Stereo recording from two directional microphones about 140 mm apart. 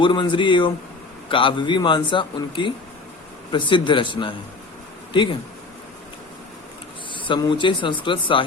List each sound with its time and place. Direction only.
0.0 s speech: 35° left (ahead or behind)
7.3 s speech: 35° left (ahead or behind)